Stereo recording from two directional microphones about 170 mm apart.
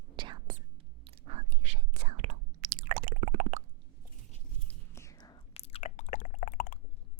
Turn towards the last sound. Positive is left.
turn(degrees=55)  # may be behind; listen again after turning